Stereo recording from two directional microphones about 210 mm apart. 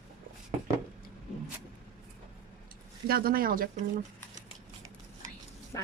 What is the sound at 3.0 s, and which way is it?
Speech, 45° right (ahead or behind).